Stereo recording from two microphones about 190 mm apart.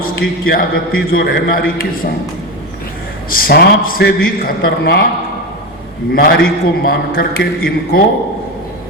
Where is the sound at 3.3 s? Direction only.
55° left (ahead or behind).